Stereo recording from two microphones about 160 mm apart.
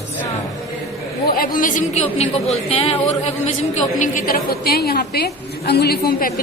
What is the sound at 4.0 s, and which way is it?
A woman's voice, 60° left (ahead or behind).